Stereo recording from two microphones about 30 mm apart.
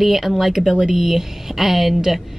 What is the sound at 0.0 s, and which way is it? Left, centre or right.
Speech, centre.